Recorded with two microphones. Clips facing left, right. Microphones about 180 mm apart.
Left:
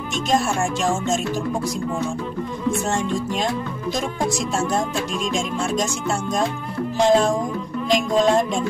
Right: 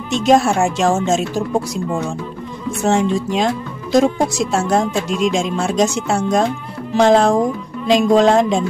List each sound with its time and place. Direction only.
0.3 s speech: 65° right (ahead or behind)
2.8 s speech: 70° right (ahead or behind)